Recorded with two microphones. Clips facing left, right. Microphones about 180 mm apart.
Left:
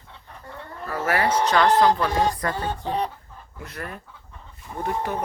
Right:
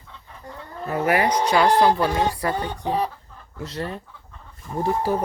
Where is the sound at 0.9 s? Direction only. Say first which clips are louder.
Right 3 dB; 15° right (ahead or behind).